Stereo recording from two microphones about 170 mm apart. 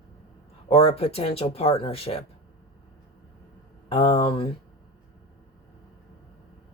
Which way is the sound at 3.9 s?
35° left (ahead or behind).